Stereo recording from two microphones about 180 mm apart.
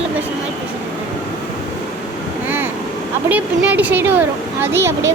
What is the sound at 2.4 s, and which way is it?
Vehicle, 10° right (ahead or behind).